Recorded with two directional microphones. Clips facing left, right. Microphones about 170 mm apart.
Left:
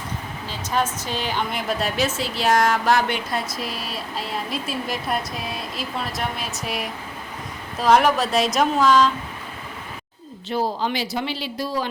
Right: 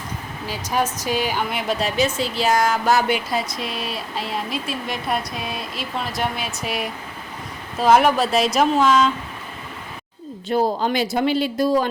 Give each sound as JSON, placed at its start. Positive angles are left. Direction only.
{"t": 0.4, "sound": "a woman's voice", "side_deg": -10}
{"t": 10.5, "sound": "speech", "side_deg": -50}